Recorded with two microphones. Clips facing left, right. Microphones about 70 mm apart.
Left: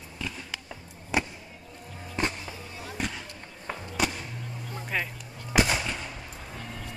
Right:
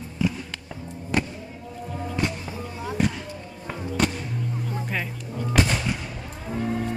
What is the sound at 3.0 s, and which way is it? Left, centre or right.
Basketball bounce, centre.